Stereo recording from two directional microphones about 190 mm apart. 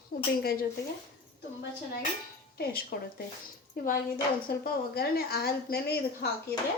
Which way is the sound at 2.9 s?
55° left (ahead or behind).